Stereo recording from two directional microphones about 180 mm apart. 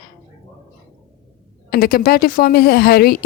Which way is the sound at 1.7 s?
60° left (ahead or behind).